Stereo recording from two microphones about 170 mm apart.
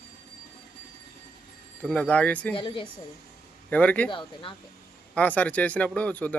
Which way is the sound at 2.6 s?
30° left (ahead or behind).